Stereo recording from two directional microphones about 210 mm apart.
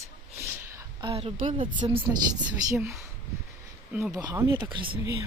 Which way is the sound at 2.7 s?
10° right (ahead or behind).